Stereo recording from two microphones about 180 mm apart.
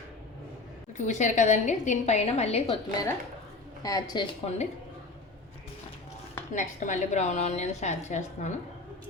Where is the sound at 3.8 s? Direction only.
20° left (ahead or behind).